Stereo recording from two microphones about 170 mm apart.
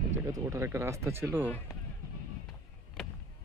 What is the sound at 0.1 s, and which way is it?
Speech, 20° right (ahead or behind).